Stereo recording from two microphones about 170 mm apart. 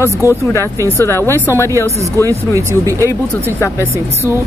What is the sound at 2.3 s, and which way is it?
A woman's voice, 20° right (ahead or behind).